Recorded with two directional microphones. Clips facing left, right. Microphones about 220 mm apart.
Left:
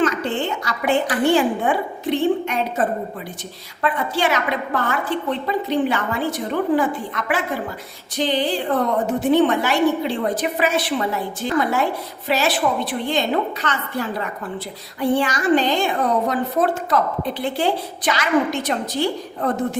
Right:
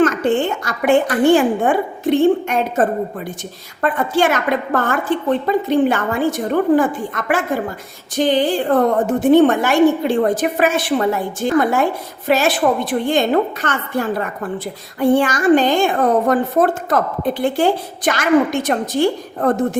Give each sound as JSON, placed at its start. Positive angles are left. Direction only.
{"t": 0.0, "sound": "a woman's voice", "side_deg": -50}